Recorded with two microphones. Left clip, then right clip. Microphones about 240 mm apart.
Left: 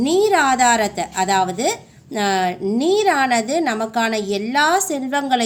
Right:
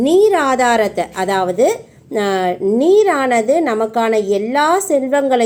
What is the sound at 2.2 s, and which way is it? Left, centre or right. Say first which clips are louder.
Speech: right 3 dB; left.